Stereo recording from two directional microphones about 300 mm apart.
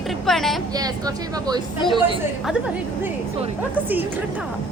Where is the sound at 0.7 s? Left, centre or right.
Centre.